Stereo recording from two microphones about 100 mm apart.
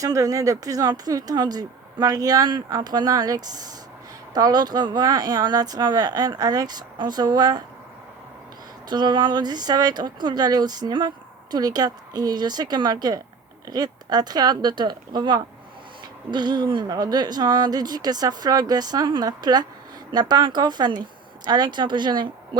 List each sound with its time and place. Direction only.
0.0 s speech: 35° right (ahead or behind)
8.9 s speech: 45° right (ahead or behind)